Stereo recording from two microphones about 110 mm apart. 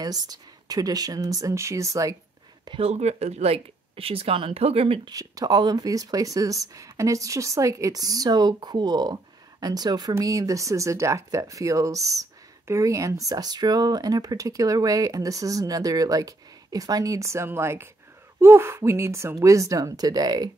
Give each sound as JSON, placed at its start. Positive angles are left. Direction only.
{"t": 0.0, "sound": "speech", "side_deg": -35}
{"t": 2.8, "sound": "speech", "side_deg": -85}
{"t": 5.1, "sound": "speech", "side_deg": -35}